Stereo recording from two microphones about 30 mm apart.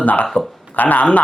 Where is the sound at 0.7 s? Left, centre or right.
Left.